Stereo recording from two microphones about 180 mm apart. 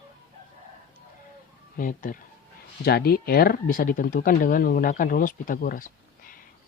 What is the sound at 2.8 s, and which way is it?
Speech, 60° left (ahead or behind).